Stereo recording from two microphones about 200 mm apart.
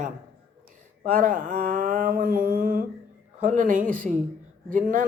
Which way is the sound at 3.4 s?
40° right (ahead or behind).